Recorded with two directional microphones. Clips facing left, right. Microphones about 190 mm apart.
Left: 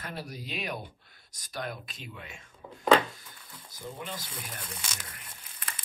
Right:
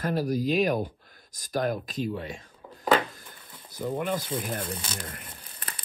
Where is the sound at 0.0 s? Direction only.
40° right (ahead or behind).